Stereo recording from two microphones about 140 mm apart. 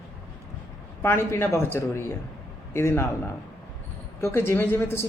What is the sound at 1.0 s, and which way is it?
A woman's voice, 15° left (ahead or behind).